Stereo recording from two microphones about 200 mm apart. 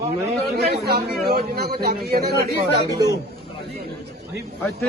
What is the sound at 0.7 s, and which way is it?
Speech, 50° right (ahead or behind).